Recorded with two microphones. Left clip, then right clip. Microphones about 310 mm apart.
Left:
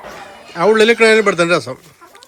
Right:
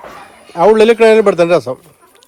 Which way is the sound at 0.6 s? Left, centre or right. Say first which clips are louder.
Right 3 dB; centre.